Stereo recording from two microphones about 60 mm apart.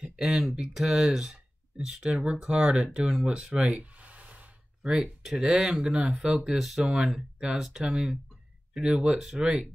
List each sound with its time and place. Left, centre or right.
0.0 s speech: centre
4.0 s a sound: right
4.8 s speech: centre